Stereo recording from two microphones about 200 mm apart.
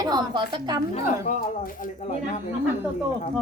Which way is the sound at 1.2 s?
45° left (ahead or behind).